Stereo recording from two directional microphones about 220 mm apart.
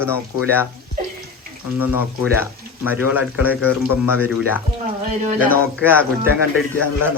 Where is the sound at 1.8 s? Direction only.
10° right (ahead or behind).